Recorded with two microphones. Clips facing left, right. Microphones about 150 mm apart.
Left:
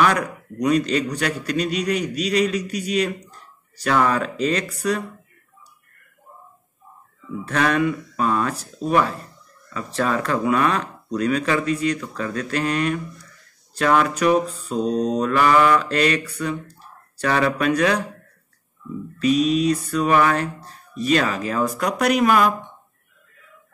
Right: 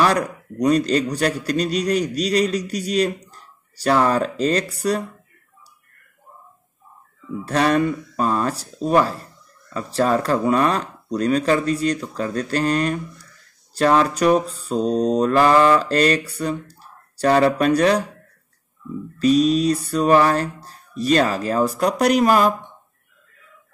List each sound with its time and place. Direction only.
0.0 s a man's voice: 35° right (ahead or behind)
7.4 s a man's voice: 35° right (ahead or behind)
19.1 s a man's voice: 35° right (ahead or behind)